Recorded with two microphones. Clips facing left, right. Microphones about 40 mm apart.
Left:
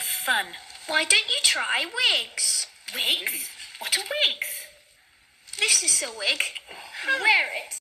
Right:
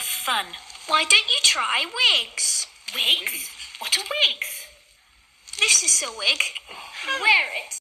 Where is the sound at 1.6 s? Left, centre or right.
Right.